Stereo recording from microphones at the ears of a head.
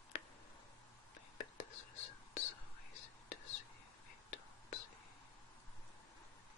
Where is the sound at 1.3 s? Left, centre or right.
Left.